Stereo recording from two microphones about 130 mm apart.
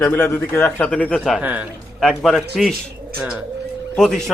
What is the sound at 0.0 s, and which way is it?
Speech, 20° left (ahead or behind).